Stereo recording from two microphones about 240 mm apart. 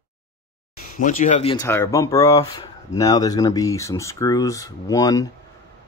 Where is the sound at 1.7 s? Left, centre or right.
Centre.